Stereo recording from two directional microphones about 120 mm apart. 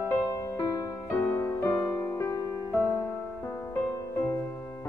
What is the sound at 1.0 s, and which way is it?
Music, 20° left (ahead or behind).